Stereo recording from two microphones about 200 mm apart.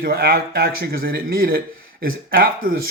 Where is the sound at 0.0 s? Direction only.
50° right (ahead or behind).